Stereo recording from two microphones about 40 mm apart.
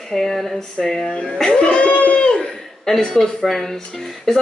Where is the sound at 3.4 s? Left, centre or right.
Centre.